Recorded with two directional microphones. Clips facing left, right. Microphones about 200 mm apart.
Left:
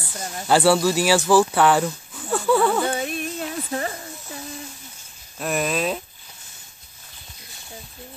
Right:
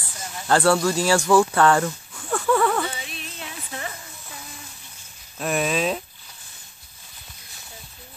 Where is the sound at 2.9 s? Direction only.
50° left (ahead or behind).